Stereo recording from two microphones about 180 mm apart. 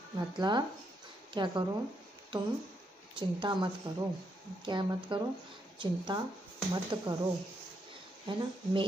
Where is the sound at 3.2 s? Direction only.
25° right (ahead or behind).